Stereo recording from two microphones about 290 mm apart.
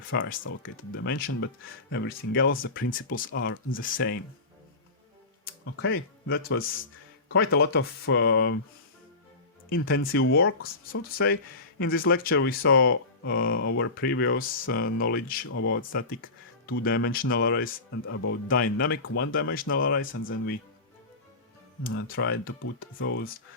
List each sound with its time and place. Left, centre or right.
0.1 s speech: left
3.3 s speech: left
3.8 s speech: left
5.7 s speech: left
9.7 s speech: left
10.0 s speech: left
15.4 s speech: left
16.8 s speech: left
18.5 s speech: left
22.1 s speech: left